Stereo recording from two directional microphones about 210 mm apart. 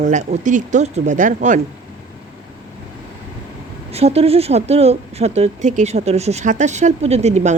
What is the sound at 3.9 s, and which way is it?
Speech, 30° right (ahead or behind).